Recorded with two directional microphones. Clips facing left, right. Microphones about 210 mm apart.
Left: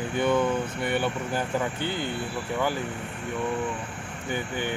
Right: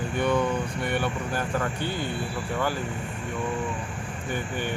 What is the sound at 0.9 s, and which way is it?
Speech, 25° left (ahead or behind).